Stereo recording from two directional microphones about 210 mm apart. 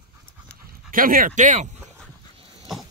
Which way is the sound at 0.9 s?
40° right (ahead or behind).